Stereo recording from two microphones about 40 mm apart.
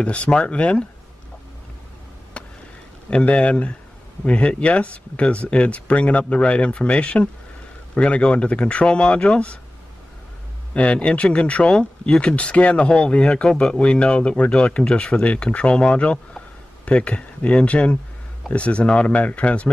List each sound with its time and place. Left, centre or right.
0.0 s speech: left
2.4 s a sound: left
3.1 s speech: left
10.7 s speech: left